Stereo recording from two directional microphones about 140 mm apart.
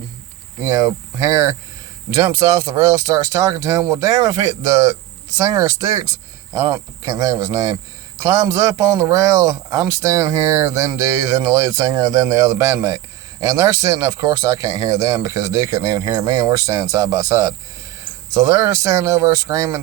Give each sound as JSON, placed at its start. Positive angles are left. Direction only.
{"t": 0.6, "sound": "speech", "side_deg": -20}